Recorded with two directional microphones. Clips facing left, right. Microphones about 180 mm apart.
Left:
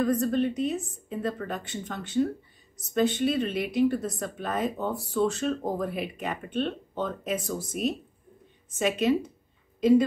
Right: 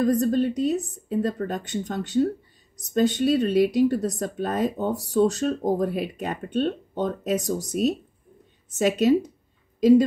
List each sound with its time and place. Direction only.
0.0 s speech: 40° right (ahead or behind)